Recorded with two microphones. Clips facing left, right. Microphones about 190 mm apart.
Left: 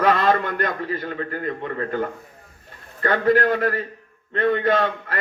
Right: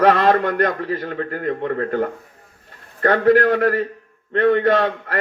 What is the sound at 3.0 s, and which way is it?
A man's voice, 65° right (ahead or behind).